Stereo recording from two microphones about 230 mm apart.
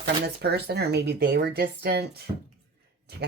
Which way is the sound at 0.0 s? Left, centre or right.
Right.